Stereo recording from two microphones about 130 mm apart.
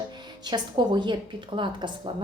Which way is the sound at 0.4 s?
35° right (ahead or behind).